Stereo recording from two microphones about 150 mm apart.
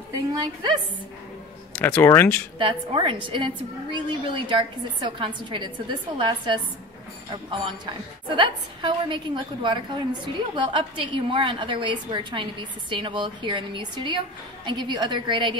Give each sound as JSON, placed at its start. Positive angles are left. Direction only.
{"t": 0.4, "sound": "a woman's voice", "side_deg": -30}
{"t": 1.8, "sound": "speech", "side_deg": 15}
{"t": 2.6, "sound": "a woman's voice", "side_deg": -35}